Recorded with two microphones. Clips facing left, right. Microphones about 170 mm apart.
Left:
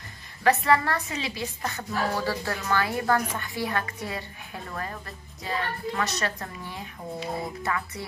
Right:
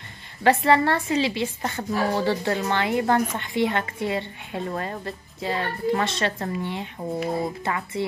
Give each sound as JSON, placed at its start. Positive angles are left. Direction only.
{"t": 0.4, "sound": "a woman's voice", "side_deg": -30}